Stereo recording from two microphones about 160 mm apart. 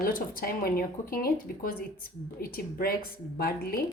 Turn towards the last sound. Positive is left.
turn(degrees=65)  # may be behind; listen again after turning